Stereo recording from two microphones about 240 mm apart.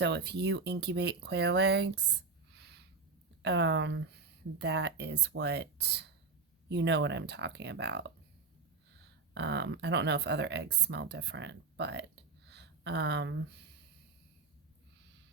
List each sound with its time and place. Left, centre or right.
0.0 s speech: right